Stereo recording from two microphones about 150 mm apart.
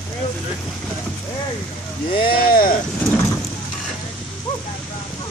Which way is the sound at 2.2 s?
75° left (ahead or behind).